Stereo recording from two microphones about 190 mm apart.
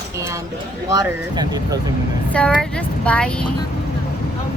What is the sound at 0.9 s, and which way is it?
Speech, 20° right (ahead or behind).